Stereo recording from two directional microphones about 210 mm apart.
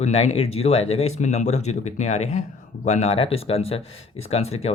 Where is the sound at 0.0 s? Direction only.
30° left (ahead or behind).